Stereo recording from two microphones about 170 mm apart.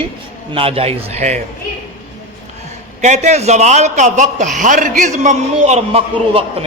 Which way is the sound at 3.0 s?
45° right (ahead or behind).